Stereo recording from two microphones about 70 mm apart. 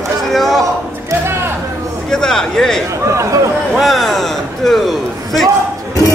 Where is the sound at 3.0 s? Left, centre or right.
Right.